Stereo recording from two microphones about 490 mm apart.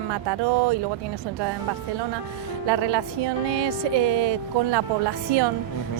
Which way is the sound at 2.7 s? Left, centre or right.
Right.